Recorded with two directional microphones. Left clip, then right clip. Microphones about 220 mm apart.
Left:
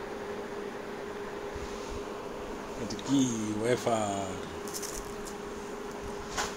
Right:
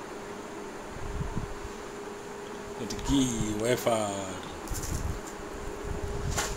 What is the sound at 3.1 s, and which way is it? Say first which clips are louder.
Speech: right 1 dB; 15° right (ahead or behind).